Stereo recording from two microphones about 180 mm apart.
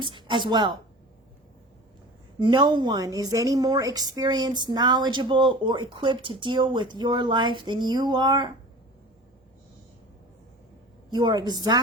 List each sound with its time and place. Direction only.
0.0 s a woman's voice: 25° right (ahead or behind)
2.4 s a woman's voice: 25° right (ahead or behind)
11.1 s a woman's voice: 25° right (ahead or behind)